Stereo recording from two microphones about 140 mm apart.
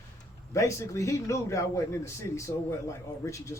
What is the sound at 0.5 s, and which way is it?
Speech, 20° left (ahead or behind).